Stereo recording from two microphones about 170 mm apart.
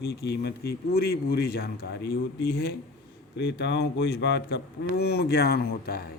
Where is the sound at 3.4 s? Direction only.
90° left.